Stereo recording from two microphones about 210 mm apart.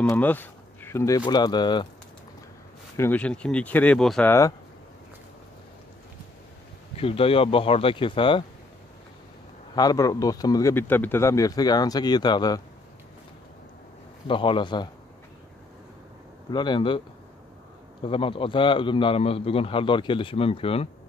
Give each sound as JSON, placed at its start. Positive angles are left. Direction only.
{"t": 0.0, "sound": "speech", "side_deg": 10}
{"t": 3.0, "sound": "speech", "side_deg": 5}
{"t": 7.0, "sound": "a man's voice", "side_deg": 25}
{"t": 9.8, "sound": "speech", "side_deg": 15}
{"t": 14.2, "sound": "a man's voice", "side_deg": 25}
{"t": 16.4, "sound": "a man's voice", "side_deg": 20}
{"t": 18.0, "sound": "a man's voice", "side_deg": 25}